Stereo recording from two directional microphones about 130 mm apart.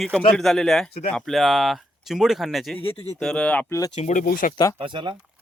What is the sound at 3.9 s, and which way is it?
Speech, 70° left (ahead or behind).